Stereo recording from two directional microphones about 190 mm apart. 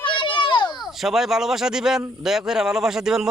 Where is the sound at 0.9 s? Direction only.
Centre (ahead or behind).